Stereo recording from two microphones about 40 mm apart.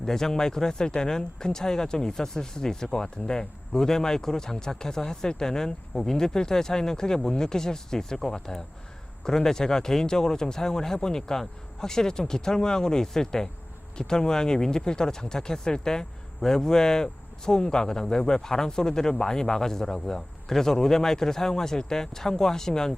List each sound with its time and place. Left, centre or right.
0.0 s speech: centre